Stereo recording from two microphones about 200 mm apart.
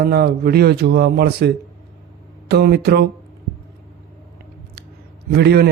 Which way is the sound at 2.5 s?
50° right (ahead or behind).